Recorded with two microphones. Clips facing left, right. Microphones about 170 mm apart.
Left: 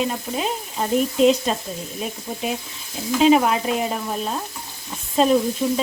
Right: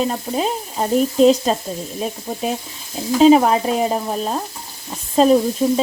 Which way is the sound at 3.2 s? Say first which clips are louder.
Right 5 dB; 35° right (ahead or behind).